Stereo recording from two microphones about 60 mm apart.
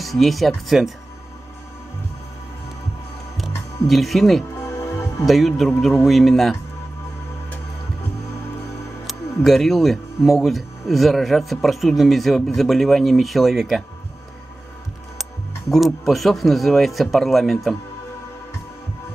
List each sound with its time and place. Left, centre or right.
0.0 s speech: centre
3.3 s music: centre
4.6 s music: left
5.2 s speech: centre
9.0 s speech: centre
15.7 s speech: centre